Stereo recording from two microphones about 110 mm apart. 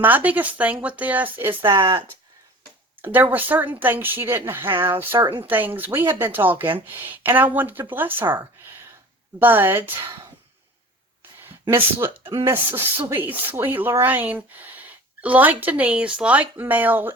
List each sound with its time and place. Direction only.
0.0 s speech: 15° right (ahead or behind)
1.6 s speech: 50° right (ahead or behind)
3.0 s a woman's voice: 15° right (ahead or behind)
11.7 s a woman's voice: 20° right (ahead or behind)
12.2 s speech: 50° right (ahead or behind)
12.5 s speech: 20° right (ahead or behind)